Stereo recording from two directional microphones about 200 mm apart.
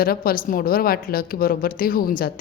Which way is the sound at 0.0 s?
45° left (ahead or behind).